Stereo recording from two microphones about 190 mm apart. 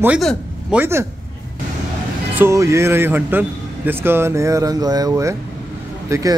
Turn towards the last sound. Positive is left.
turn(degrees=-20)  # may be behind; listen again after turning